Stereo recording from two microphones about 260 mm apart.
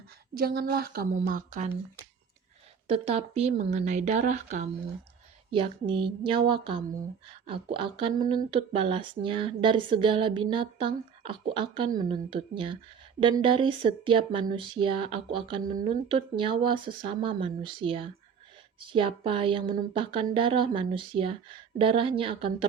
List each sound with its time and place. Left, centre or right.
0.3 s a woman's voice: right
2.8 s speech: right
15.6 s a woman's voice: right
16.0 s speech: centre